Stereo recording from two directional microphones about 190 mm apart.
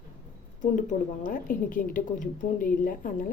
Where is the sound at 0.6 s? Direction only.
45° left (ahead or behind).